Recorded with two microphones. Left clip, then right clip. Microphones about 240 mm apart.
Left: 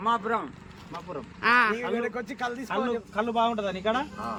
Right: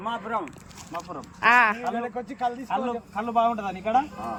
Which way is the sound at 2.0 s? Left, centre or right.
Centre.